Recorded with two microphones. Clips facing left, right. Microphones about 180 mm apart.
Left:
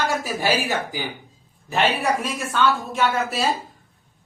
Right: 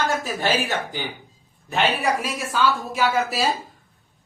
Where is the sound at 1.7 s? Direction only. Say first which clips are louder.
Left 1 dB; centre (ahead or behind).